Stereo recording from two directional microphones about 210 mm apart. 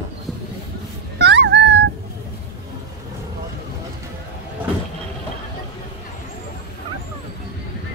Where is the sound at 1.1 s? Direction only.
55° right (ahead or behind).